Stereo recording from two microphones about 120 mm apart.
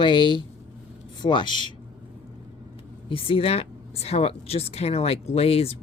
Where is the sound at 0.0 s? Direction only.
40° left (ahead or behind).